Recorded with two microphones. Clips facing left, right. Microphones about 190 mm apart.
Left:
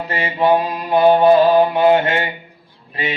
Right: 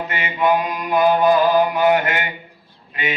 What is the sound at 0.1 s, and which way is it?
Mantra, 30° left (ahead or behind).